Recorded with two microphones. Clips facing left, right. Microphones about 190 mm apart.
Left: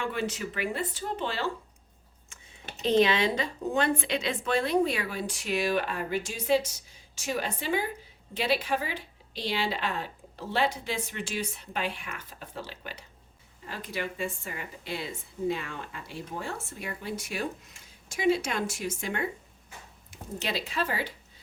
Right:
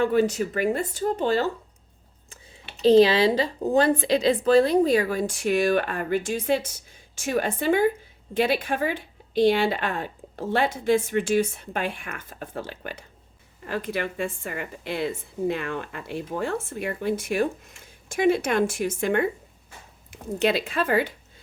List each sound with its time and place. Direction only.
0.0 s a woman's voice: 40° right (ahead or behind)
2.8 s a woman's voice: 35° right (ahead or behind); by 21.1 s 55° right (ahead or behind)